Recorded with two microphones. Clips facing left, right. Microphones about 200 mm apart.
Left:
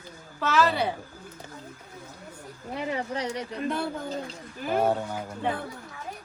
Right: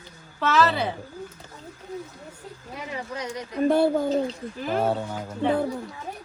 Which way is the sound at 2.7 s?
30° left (ahead or behind).